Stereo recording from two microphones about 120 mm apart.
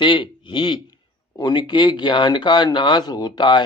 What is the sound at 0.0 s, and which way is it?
Speech, 40° left (ahead or behind).